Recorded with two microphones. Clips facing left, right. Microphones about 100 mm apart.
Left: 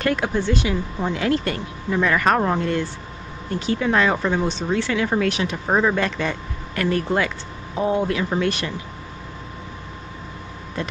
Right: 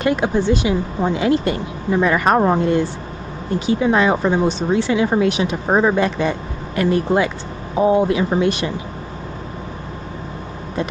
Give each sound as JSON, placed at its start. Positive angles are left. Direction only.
{"t": 0.0, "sound": "speech", "side_deg": -15}